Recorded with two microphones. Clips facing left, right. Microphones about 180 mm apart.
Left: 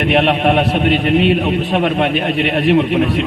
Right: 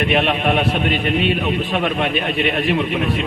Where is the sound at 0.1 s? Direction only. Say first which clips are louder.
Left 4 dB; 65° left (ahead or behind).